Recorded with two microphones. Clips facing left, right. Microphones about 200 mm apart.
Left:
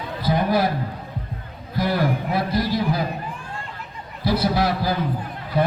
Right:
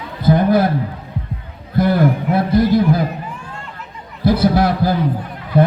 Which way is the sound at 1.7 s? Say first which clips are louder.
Right 7 dB; 55° right (ahead or behind).